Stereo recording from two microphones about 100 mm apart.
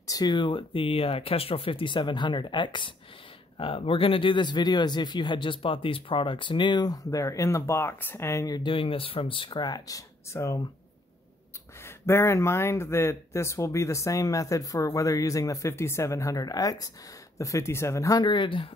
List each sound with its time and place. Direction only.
0.0 s speech: 40° left (ahead or behind)
3.5 s speech: 65° left (ahead or behind); by 8.6 s 35° left (ahead or behind)
8.6 s speech: 65° left (ahead or behind); by 10.6 s 35° left (ahead or behind)
12.1 s speech: 25° left (ahead or behind)
18.2 s speech: 50° left (ahead or behind)